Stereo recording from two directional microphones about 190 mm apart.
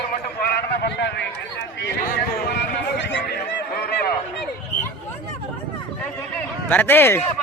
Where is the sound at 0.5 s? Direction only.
65° left (ahead or behind).